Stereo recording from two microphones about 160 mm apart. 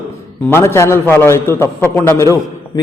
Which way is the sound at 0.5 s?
15° left (ahead or behind).